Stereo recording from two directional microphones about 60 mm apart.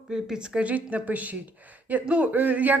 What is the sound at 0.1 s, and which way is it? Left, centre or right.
A man's voice, centre.